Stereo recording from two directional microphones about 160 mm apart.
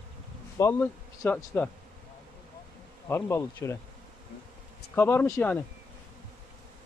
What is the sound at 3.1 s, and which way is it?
Speech, 15° left (ahead or behind).